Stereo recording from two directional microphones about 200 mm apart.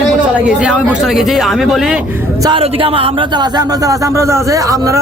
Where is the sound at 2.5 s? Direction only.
30° right (ahead or behind).